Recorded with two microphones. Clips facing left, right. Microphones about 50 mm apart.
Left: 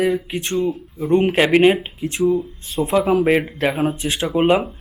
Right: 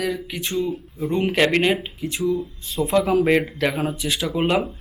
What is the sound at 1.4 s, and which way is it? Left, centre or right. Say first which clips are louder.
Speech: left 4 dB; centre.